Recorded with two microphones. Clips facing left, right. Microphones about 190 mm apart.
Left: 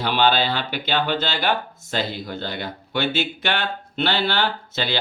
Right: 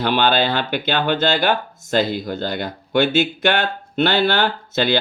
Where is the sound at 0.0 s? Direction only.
50° right (ahead or behind).